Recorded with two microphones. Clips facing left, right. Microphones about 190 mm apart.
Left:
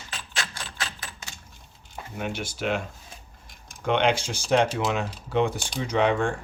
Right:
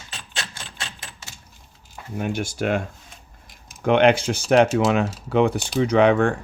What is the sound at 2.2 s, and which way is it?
Speech, 50° right (ahead or behind).